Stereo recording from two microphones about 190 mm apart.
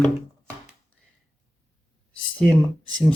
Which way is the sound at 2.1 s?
5° left (ahead or behind).